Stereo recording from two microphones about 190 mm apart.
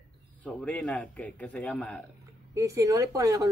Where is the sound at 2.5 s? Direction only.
15° right (ahead or behind).